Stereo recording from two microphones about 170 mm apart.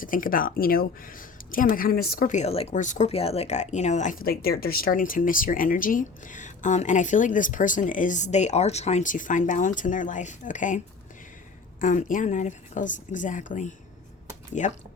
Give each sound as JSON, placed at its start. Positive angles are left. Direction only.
{"t": 0.0, "sound": "speech", "side_deg": 55}
{"t": 11.8, "sound": "speech", "side_deg": 50}